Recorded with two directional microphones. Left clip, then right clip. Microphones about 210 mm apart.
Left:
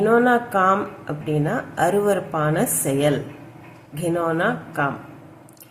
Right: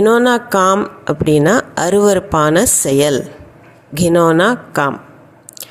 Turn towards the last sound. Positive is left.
turn(degrees=-50)  # may be behind; listen again after turning